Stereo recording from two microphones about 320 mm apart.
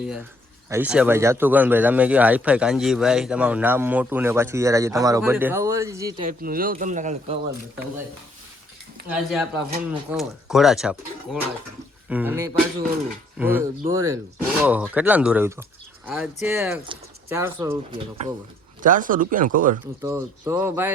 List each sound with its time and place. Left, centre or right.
0.0 s speech: centre
6.2 s speech: right
9.0 s speech: centre
18.8 s speech: right
20.0 s speech: centre